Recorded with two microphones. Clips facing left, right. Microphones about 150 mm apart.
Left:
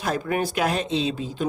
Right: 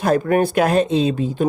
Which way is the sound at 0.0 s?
50° right (ahead or behind).